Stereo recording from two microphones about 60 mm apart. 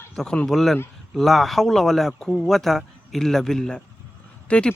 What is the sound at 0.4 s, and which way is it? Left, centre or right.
Speech, centre.